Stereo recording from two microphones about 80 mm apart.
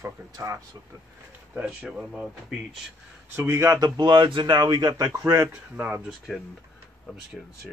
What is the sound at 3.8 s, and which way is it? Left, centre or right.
A man's voice, right.